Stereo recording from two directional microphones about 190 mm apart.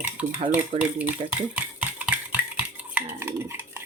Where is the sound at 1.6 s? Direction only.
5° right (ahead or behind).